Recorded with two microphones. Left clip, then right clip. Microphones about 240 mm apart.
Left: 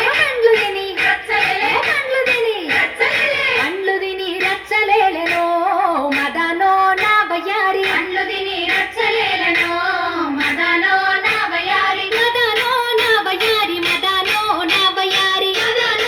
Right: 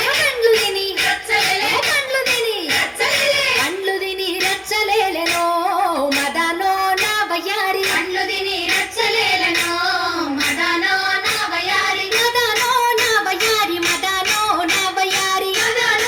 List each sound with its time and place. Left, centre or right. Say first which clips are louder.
0.0 s a sound: left 2 dB; right
1.0 s music: left 3 dB; right
2.7 s a sound: left 2 dB; right
6.6 s music: left 7 dB; right
8.7 s child singing: left 2 dB; right
10.7 s music: left 5 dB; right